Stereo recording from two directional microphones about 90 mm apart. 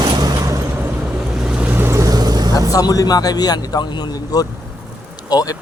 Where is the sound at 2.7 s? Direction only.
45° left (ahead or behind).